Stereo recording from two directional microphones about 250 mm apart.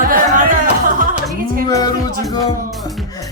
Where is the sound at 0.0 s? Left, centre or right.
Right.